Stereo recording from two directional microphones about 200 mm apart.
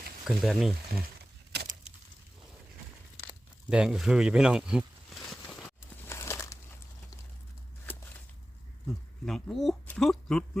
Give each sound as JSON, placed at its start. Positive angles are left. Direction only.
{"t": 0.3, "sound": "speech", "side_deg": 0}
{"t": 3.7, "sound": "a sound", "side_deg": -5}
{"t": 6.1, "sound": "crumpling", "side_deg": 15}
{"t": 9.2, "sound": "speech", "side_deg": 0}